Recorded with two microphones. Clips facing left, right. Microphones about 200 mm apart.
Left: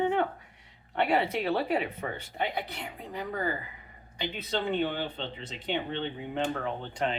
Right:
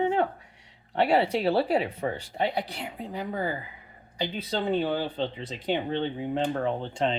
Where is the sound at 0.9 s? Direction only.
30° right (ahead or behind).